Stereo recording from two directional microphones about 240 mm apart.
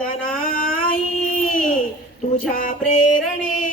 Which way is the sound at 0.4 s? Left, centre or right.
Left.